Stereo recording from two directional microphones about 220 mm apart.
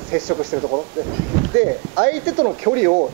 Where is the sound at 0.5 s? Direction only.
20° right (ahead or behind).